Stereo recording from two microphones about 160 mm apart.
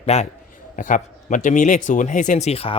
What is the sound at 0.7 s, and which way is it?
Speech, 55° left (ahead or behind).